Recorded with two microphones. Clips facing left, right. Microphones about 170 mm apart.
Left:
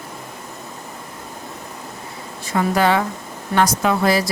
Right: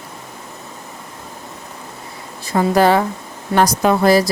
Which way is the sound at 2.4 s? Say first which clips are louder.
Right 4 dB; 35° right (ahead or behind).